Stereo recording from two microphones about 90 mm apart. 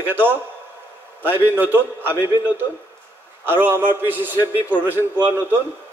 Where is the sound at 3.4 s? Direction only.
25° right (ahead or behind).